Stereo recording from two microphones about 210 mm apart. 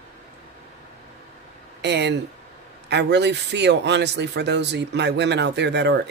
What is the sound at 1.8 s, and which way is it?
A man's voice, 55° right (ahead or behind).